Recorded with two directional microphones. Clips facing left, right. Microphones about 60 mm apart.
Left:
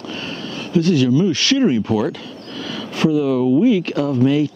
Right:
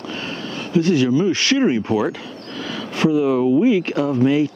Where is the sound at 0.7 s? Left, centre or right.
Right.